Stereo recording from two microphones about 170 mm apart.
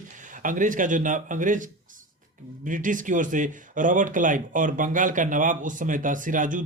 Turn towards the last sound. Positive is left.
turn(degrees=-50)  # may be behind; listen again after turning